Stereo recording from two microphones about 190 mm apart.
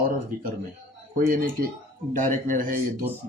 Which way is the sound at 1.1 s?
45° right (ahead or behind).